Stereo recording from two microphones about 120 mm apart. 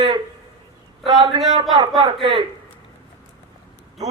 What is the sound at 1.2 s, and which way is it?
Speech, 40° right (ahead or behind).